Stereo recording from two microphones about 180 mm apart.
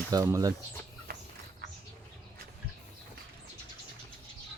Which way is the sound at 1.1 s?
60° right (ahead or behind).